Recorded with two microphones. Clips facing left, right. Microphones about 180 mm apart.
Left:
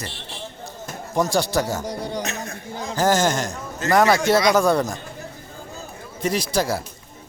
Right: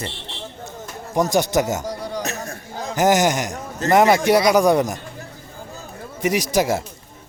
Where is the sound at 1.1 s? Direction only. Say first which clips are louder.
Right 2 dB; 15° right (ahead or behind).